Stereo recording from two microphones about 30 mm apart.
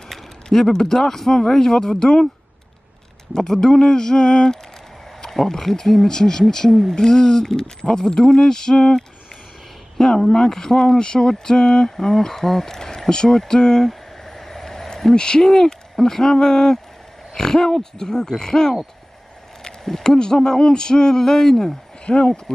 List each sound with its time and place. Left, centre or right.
0.1 s a sound: centre
0.7 s speech: centre
3.3 s speech: centre
5.3 s speech: centre
6.0 s speech: centre
14.2 s vehicle: centre
15.1 s speech: left
20.0 s speech: left
22.0 s speech: left